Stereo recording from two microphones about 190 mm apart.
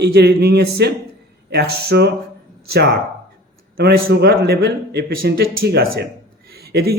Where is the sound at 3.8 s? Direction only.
55° right (ahead or behind).